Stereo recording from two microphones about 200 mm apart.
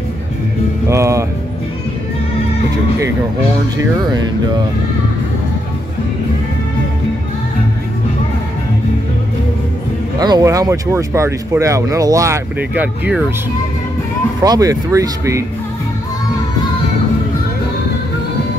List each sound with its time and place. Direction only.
0.8 s speech: 15° right (ahead or behind)
10.1 s speech: 20° right (ahead or behind)
14.4 s speech: 20° right (ahead or behind)